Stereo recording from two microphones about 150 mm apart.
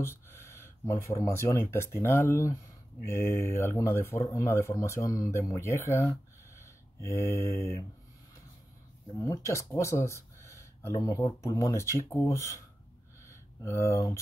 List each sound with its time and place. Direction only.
0.0 s speech: 15° left (ahead or behind)
9.2 s speech: 20° left (ahead or behind)